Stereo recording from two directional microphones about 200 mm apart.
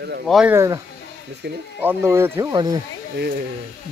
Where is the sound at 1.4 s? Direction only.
55° right (ahead or behind).